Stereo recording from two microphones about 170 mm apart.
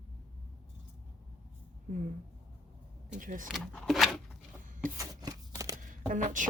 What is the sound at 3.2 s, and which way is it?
Speech, 50° right (ahead or behind).